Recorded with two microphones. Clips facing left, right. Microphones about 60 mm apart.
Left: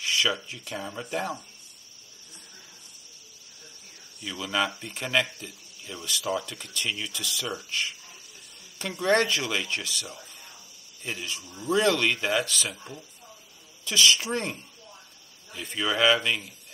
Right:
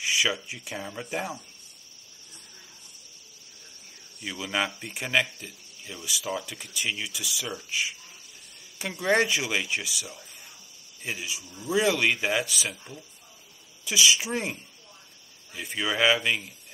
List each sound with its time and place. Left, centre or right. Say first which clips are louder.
0.0 s speech: even; centre
4.2 s speech: left 1 dB; centre
9.0 s speech: even; centre
13.8 s speech: left 1 dB; centre